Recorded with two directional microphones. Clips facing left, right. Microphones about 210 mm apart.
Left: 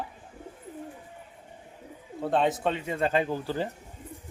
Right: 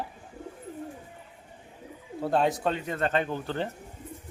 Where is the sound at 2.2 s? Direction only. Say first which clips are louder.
Even; centre (ahead or behind).